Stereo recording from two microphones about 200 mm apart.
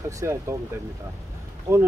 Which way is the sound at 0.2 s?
15° right (ahead or behind).